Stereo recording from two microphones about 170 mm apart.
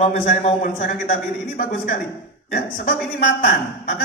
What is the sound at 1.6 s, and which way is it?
Speech, 55° left (ahead or behind).